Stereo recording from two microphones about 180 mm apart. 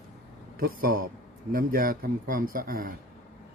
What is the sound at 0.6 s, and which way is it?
Speech, 55° right (ahead or behind).